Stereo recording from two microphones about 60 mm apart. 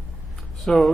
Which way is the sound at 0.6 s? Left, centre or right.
Centre.